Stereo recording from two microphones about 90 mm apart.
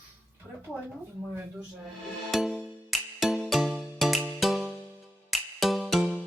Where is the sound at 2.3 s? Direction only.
Centre (ahead or behind).